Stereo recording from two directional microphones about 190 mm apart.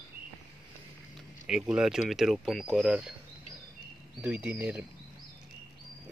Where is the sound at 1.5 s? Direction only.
5° right (ahead or behind).